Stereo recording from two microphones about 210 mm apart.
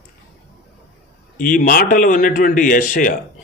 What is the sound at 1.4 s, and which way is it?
A man's voice, 40° left (ahead or behind).